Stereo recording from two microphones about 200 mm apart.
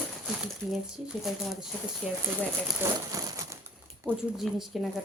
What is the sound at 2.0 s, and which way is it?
Speech, 5° right (ahead or behind).